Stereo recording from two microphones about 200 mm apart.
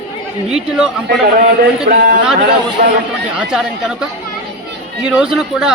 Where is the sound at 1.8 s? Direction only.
40° right (ahead or behind).